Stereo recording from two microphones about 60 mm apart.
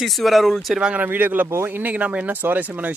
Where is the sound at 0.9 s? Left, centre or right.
Right.